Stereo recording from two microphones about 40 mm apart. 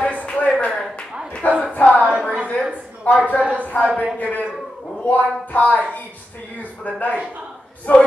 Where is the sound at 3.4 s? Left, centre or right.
Right.